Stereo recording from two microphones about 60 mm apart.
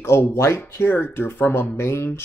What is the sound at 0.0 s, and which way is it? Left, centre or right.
Speech, left.